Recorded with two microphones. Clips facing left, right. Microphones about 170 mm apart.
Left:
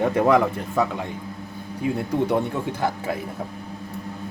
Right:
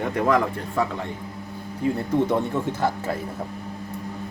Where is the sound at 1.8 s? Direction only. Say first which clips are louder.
Right 1 dB; 10° left (ahead or behind).